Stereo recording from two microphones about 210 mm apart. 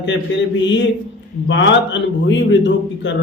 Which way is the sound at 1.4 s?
60° left (ahead or behind).